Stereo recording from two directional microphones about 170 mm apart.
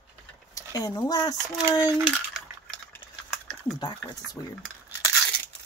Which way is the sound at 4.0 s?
25° left (ahead or behind).